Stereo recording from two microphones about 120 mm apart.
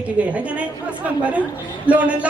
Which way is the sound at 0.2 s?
10° right (ahead or behind).